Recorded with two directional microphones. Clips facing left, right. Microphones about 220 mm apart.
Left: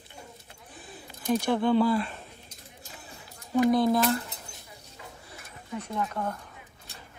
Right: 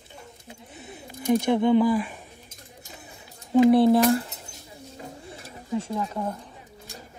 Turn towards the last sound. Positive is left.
turn(degrees=-25)  # may be behind; listen again after turning